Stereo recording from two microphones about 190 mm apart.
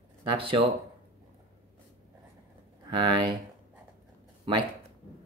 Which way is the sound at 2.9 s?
25° right (ahead or behind).